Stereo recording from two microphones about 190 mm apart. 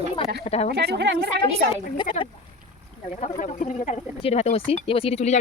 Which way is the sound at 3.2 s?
40° left (ahead or behind).